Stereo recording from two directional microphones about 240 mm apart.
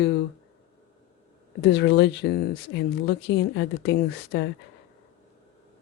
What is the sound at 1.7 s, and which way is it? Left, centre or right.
Speech, left.